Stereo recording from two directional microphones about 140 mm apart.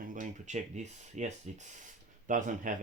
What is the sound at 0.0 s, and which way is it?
Speech, 70° right (ahead or behind).